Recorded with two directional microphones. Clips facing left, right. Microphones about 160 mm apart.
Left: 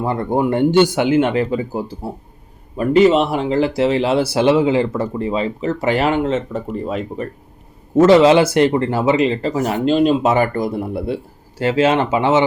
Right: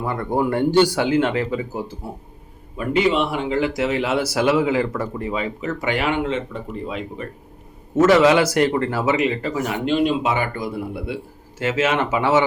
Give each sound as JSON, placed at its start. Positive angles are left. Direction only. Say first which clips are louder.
{"t": 0.0, "sound": "speech", "louder": "left 4 dB", "side_deg": 25}
{"t": 2.7, "sound": "speech", "louder": "left 7 dB", "side_deg": 40}
{"t": 7.9, "sound": "speech", "louder": "left 4 dB", "side_deg": 30}